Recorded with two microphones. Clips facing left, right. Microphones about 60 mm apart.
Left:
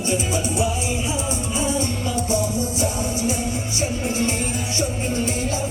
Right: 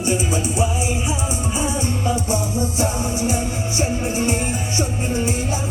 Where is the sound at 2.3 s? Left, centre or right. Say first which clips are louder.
Right 1 dB; right.